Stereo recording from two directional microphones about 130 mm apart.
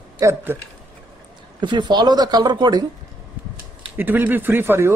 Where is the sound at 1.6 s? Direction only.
35° right (ahead or behind).